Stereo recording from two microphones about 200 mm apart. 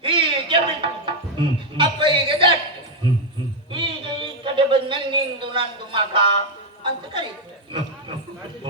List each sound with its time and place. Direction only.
0.0 s music: 25° right (ahead or behind)
3.7 s a sound: 25° right (ahead or behind)
6.8 s a woman's voice: 25° right (ahead or behind)